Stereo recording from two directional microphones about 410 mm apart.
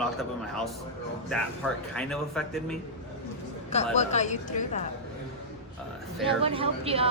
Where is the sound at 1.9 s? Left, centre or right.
Centre.